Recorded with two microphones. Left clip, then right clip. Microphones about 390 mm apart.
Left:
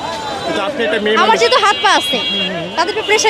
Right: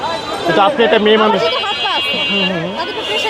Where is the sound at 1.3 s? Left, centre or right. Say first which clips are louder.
Left 4 dB; left.